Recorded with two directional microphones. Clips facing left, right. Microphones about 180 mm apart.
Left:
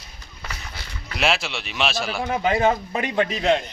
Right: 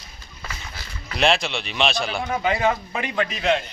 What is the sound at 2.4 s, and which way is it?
Speech, 30° left (ahead or behind).